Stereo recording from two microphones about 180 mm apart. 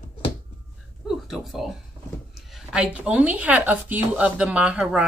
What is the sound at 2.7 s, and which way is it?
Speech, 5° right (ahead or behind).